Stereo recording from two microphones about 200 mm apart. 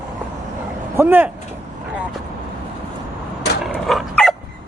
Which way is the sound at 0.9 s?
10° right (ahead or behind).